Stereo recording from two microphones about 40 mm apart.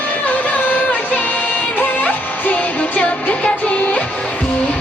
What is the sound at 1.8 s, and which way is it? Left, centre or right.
Music, left.